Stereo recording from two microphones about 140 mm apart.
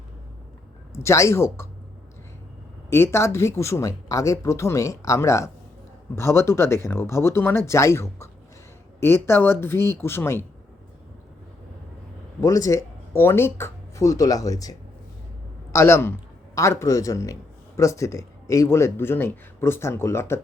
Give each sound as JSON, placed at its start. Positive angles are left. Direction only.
{"t": 0.9, "sound": "speech", "side_deg": 20}
{"t": 2.9, "sound": "speech", "side_deg": 20}
{"t": 12.4, "sound": "speech", "side_deg": 25}